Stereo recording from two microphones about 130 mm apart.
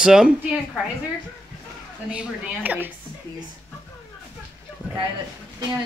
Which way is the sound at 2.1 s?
10° right (ahead or behind).